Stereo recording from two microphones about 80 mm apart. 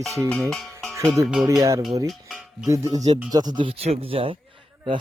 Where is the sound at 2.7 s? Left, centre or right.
Right.